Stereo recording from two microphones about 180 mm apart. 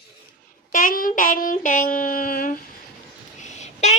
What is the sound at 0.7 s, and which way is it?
Child singing, 50° left (ahead or behind).